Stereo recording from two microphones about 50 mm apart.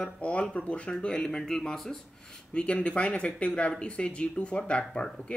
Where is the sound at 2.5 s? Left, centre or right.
Left.